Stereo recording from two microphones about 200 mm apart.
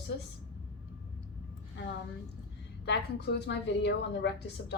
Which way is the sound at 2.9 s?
55° left (ahead or behind).